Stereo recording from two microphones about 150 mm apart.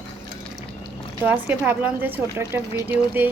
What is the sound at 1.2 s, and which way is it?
Speech, 10° right (ahead or behind).